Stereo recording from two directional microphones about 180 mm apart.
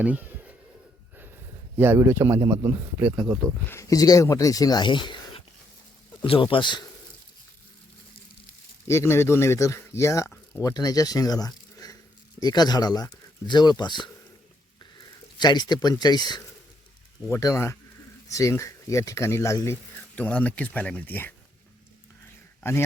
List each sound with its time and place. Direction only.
0.0 s a man's voice: 10° right (ahead or behind)
1.7 s a man's voice: 10° right (ahead or behind)
3.7 s speech: 15° left (ahead or behind)
8.9 s speech: 15° left (ahead or behind)
15.4 s speech: 25° left (ahead or behind)